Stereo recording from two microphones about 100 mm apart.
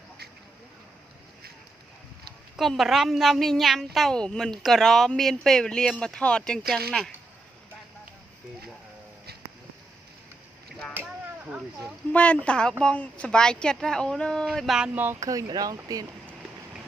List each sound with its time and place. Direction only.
2.6 s a woman's voice: centre (ahead or behind)
12.1 s speech: 15° left (ahead or behind)
14.9 s speech: 20° right (ahead or behind)
15.2 s speech: 35° right (ahead or behind)